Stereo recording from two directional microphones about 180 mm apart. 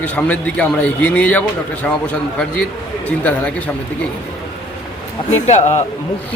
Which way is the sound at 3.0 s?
10° left (ahead or behind).